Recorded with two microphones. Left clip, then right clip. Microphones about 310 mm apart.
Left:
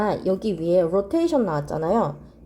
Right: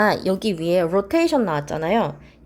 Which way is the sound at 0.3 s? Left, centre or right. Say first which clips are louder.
Right 1 dB; centre.